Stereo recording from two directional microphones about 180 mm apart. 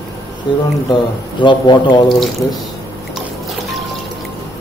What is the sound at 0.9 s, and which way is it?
Speech, 25° left (ahead or behind).